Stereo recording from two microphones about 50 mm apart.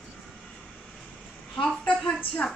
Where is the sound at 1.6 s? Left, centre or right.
Left.